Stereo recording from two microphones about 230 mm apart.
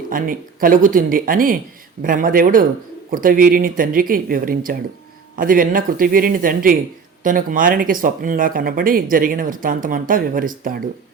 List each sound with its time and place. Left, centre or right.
0.1 s speech: right